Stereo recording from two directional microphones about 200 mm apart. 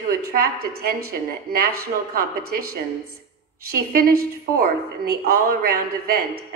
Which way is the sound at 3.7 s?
50° right (ahead or behind).